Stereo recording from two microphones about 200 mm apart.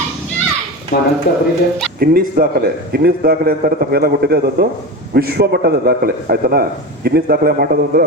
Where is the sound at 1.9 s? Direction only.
50° right (ahead or behind).